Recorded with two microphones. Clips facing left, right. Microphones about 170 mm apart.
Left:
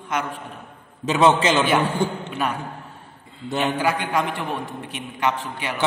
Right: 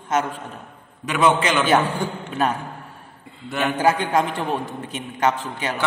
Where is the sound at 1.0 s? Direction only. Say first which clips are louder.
Left 2 dB; 25° left (ahead or behind).